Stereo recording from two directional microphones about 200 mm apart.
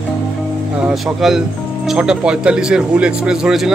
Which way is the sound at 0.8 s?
Centre (ahead or behind).